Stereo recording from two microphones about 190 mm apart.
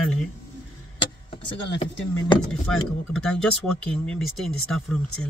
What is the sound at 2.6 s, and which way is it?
Speech, 5° left (ahead or behind).